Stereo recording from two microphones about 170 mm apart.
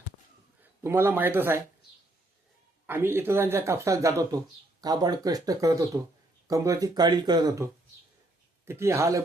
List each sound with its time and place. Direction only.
0.6 s speech: 15° right (ahead or behind)
2.8 s speech: 15° right (ahead or behind)